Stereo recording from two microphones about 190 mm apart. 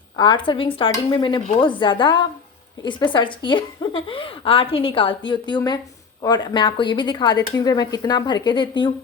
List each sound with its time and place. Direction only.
0.2 s a woman's voice: 25° left (ahead or behind)